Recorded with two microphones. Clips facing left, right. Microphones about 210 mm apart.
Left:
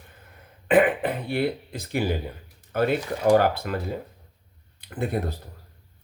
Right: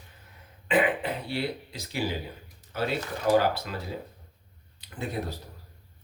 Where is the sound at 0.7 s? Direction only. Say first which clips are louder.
Left 6 dB; 55° left (ahead or behind).